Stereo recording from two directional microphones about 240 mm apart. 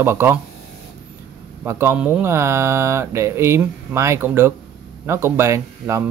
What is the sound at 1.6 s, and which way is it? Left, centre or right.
Speech, centre.